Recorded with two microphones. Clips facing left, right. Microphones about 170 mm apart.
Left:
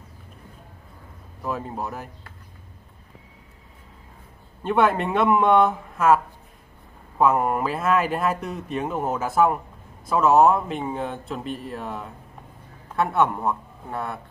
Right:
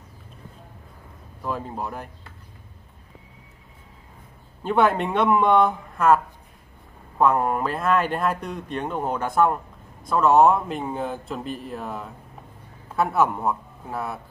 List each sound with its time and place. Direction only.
1.4 s speech: 5° left (ahead or behind)
4.6 s a man's voice: centre (ahead or behind)